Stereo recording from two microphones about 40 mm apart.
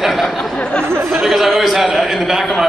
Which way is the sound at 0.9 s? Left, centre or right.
Right.